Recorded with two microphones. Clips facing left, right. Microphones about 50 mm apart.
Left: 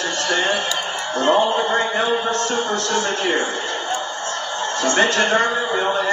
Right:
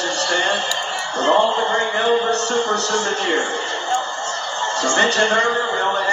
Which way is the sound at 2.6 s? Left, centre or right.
Right.